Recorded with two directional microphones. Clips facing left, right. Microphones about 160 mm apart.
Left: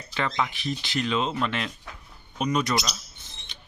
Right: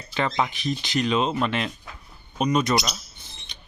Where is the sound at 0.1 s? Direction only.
25° right (ahead or behind).